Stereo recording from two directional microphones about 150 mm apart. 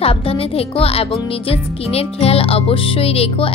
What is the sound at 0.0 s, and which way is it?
A woman's voice, 40° left (ahead or behind).